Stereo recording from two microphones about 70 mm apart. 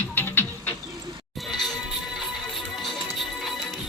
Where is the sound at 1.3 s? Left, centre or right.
Centre.